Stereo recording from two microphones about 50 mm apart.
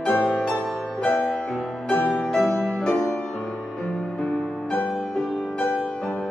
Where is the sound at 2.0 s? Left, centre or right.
Left.